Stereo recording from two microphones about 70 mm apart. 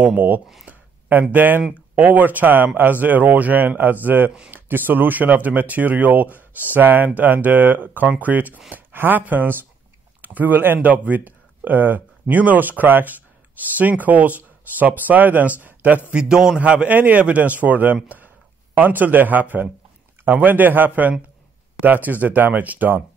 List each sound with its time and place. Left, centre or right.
0.0 s speech: right
0.7 s a sound: right
1.3 s speech: right